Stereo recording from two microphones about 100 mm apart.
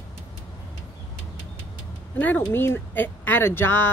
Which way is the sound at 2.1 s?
15° left (ahead or behind).